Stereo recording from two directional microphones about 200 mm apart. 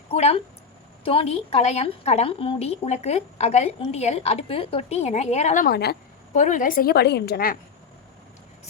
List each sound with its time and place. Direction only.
0.1 s a woman's voice: 30° left (ahead or behind); by 6.0 s 50° left (ahead or behind)
6.3 s a woman's voice: 40° left (ahead or behind)